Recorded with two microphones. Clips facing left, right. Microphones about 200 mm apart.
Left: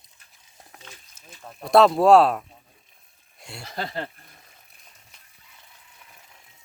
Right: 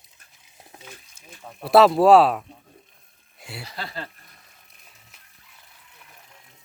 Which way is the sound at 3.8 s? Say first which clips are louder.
Left 5 dB; 20° left (ahead or behind).